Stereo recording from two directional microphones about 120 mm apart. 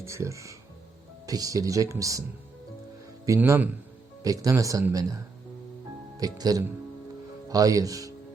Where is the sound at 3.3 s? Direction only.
20° right (ahead or behind).